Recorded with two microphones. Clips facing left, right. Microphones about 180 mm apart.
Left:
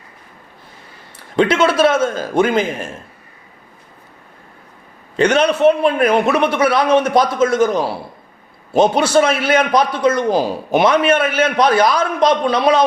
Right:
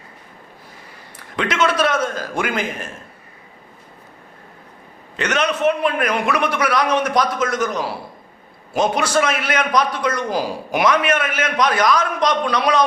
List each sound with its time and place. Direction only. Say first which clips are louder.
1.4 s a man's voice: left 6 dB; 30° left (ahead or behind)
5.1 s a man's voice: left 7 dB; 30° left (ahead or behind)